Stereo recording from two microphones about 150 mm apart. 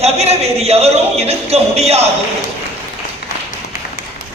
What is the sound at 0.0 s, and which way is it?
Speech, 45° right (ahead or behind).